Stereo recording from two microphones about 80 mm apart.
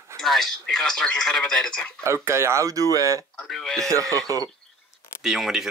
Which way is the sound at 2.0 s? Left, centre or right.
Right.